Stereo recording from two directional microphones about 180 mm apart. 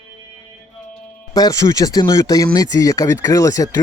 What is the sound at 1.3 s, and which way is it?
Speech, 20° left (ahead or behind).